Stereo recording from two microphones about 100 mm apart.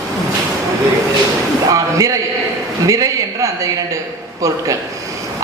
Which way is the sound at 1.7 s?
35° right (ahead or behind).